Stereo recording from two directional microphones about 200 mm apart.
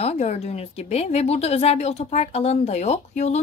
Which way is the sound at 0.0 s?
35° left (ahead or behind).